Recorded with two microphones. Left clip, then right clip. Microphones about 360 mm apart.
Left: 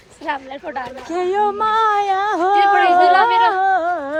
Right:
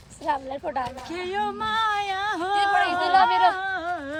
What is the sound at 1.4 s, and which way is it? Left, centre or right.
Speech, centre.